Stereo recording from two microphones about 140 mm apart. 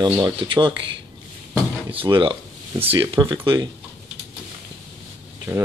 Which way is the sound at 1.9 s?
35° right (ahead or behind).